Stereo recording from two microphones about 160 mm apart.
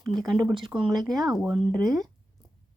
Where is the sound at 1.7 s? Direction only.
20° right (ahead or behind).